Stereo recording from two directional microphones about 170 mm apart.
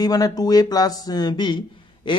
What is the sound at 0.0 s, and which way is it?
Speech, 20° left (ahead or behind).